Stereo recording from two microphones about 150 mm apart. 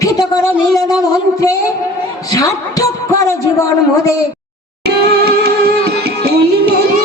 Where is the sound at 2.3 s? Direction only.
25° left (ahead or behind).